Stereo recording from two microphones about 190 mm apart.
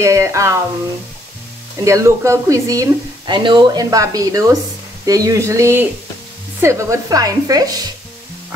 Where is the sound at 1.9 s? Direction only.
15° right (ahead or behind).